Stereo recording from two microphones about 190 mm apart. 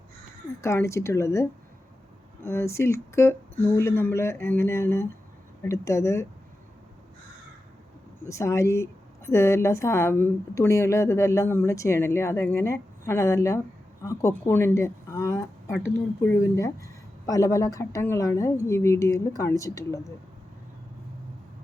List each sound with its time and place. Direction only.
0.6 s a woman's voice: 15° left (ahead or behind)
8.3 s a woman's voice: 15° left (ahead or behind)